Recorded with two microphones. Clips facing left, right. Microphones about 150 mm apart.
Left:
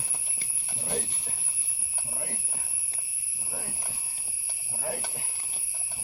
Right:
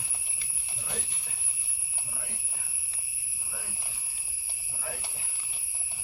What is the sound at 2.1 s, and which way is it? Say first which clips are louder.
Jingle bell: left 7 dB; 50° left (ahead or behind).